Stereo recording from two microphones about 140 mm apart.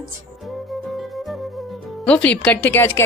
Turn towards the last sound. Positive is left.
turn(degrees=15)  # may be behind; listen again after turning